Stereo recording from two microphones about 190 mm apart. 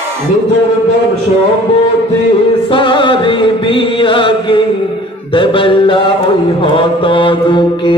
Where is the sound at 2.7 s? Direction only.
25° left (ahead or behind).